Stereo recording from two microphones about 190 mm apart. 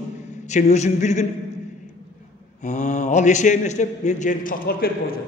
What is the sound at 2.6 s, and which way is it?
A man's voice, 40° left (ahead or behind).